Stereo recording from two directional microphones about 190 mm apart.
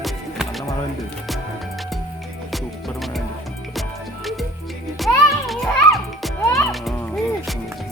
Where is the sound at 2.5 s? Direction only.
Centre (ahead or behind).